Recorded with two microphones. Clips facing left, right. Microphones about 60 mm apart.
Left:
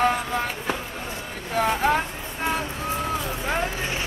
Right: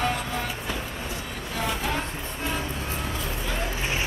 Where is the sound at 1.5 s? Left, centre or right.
Left.